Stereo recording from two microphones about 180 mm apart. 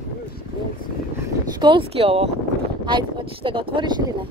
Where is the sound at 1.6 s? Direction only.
30° right (ahead or behind).